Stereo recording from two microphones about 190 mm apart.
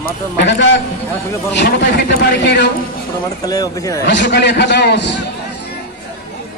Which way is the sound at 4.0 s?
65° left (ahead or behind).